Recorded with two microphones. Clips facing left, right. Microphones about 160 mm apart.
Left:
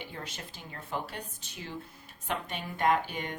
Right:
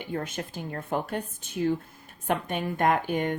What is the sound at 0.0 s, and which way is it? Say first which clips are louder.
Speech: right 10 dB; 50° right (ahead or behind).